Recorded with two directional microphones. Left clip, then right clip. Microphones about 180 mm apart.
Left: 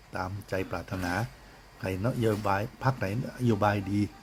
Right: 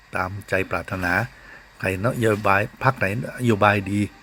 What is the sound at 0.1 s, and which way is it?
Speech, 20° right (ahead or behind).